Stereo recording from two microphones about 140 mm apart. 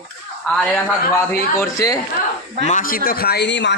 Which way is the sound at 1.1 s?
20° left (ahead or behind).